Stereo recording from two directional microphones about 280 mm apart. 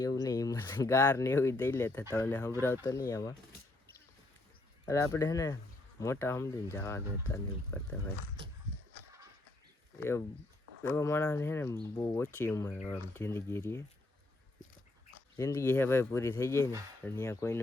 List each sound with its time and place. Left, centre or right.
0.0 s speech: centre
4.9 s speech: centre
10.0 s speech: centre
15.4 s speech: centre